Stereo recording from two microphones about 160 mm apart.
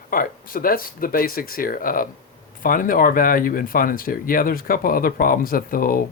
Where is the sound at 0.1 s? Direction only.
60° left (ahead or behind).